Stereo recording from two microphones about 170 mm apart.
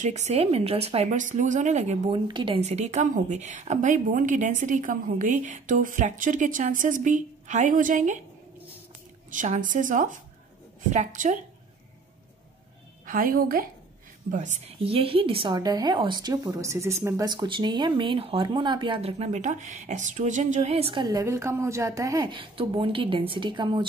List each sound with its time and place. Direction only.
0.0 s speech: 40° right (ahead or behind)
2.1 s a woman's voice: 30° right (ahead or behind); by 8.2 s 45° right (ahead or behind)
9.3 s a woman's voice: 50° right (ahead or behind)
13.0 s a woman's voice: 55° right (ahead or behind)
14.3 s a woman's voice: 45° right (ahead or behind); by 23.9 s 30° right (ahead or behind)